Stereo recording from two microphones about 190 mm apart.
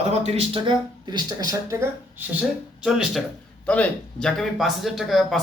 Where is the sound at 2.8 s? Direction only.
5° right (ahead or behind).